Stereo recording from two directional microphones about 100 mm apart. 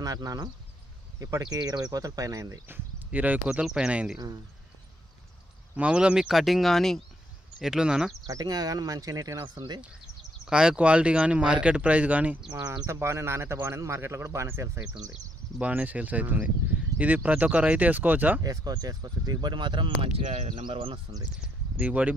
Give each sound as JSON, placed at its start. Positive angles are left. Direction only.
{"t": 0.0, "sound": "speech", "side_deg": -35}
{"t": 2.7, "sound": "a sound", "side_deg": -15}
{"t": 3.4, "sound": "speech", "side_deg": -5}
{"t": 5.8, "sound": "speech", "side_deg": -10}
{"t": 8.3, "sound": "speech", "side_deg": -40}
{"t": 10.4, "sound": "speech", "side_deg": -5}
{"t": 12.8, "sound": "speech", "side_deg": -25}
{"t": 15.6, "sound": "speech", "side_deg": -15}
{"t": 18.4, "sound": "speech", "side_deg": -35}
{"t": 21.7, "sound": "speech", "side_deg": -15}